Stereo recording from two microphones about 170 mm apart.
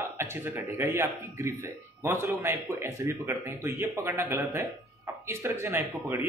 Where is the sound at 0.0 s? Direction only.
15° right (ahead or behind).